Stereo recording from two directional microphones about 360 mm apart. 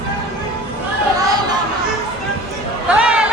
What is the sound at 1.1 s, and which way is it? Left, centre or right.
Chatter, centre.